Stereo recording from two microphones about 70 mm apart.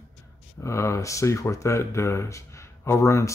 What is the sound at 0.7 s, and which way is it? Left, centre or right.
Speech, left.